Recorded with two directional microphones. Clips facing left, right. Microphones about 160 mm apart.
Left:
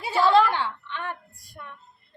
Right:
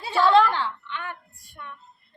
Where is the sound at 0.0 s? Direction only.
10° left (ahead or behind).